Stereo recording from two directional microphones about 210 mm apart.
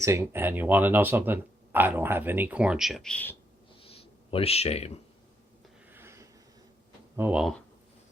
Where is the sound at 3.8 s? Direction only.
25° left (ahead or behind).